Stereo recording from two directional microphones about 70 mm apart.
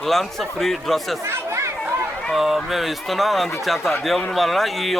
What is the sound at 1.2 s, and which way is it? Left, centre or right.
Chatter, right.